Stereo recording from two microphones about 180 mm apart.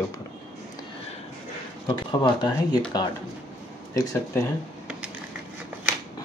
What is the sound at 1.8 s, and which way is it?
Speech, 25° left (ahead or behind).